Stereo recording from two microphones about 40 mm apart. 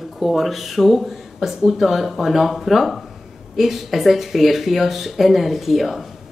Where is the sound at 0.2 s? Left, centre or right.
Centre.